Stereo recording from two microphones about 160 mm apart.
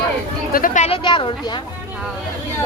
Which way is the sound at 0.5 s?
55° left (ahead or behind).